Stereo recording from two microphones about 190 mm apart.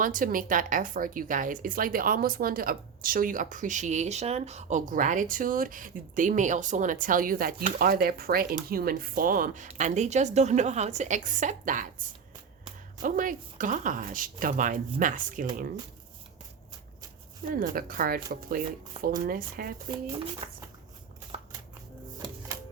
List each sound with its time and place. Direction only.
0.0 s a woman's voice: 45° right (ahead or behind)
13.0 s a woman's voice: 45° right (ahead or behind)
17.6 s a woman's voice: 50° right (ahead or behind)